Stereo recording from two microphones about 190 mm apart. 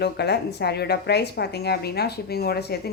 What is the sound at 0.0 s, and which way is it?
A woman's voice, 60° left (ahead or behind).